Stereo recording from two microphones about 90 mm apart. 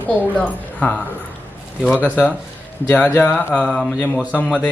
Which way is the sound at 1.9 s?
15° right (ahead or behind).